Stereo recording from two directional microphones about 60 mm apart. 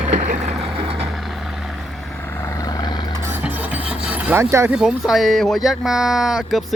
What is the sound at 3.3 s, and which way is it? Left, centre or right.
Music, right.